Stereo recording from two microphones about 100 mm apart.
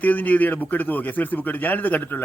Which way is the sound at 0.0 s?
15° left (ahead or behind).